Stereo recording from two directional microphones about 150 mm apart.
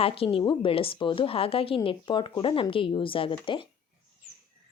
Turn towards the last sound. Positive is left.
turn(degrees=35)  # may be behind; listen again after turning